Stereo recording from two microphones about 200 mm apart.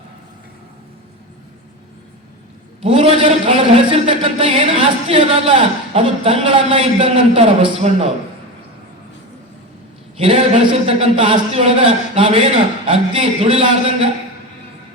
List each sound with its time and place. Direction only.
2.8 s a man's voice: 25° right (ahead or behind)
10.2 s a man's voice: 25° right (ahead or behind)